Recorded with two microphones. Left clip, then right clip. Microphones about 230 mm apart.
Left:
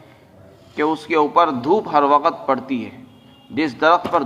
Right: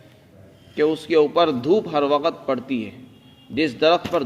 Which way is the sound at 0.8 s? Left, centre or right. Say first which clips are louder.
Even; right.